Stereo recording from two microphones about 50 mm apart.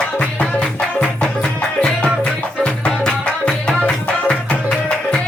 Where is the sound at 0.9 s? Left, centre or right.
Left.